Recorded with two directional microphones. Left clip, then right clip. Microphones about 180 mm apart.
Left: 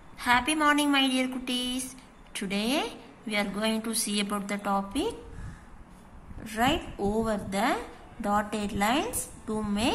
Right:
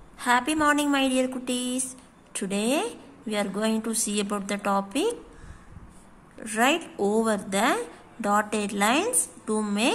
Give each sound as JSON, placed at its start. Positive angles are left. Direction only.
{"t": 0.2, "sound": "a woman's voice", "side_deg": -25}
{"t": 6.4, "sound": "a woman's voice", "side_deg": -20}